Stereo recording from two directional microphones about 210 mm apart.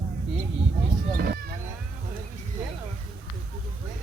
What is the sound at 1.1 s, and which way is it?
Speech, 45° right (ahead or behind).